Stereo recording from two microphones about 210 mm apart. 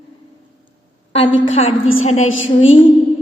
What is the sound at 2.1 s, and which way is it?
Speech, 75° left (ahead or behind).